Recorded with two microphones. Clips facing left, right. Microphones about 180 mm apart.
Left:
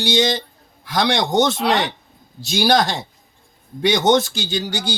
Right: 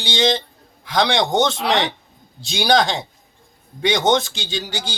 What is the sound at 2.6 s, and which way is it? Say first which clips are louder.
Speech: even; 5° left (ahead or behind).